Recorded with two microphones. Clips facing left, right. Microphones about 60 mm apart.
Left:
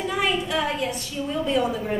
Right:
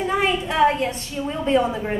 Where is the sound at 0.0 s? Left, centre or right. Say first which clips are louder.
Right 3 dB; right.